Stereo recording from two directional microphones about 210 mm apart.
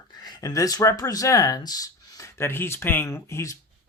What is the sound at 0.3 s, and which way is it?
Speech, 20° left (ahead or behind).